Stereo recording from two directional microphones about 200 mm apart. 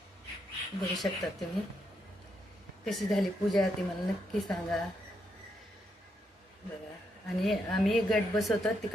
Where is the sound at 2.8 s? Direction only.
Centre (ahead or behind).